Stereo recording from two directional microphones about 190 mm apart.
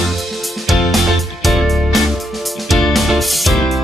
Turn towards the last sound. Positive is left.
turn(degrees=0)  # may be behind; listen again after turning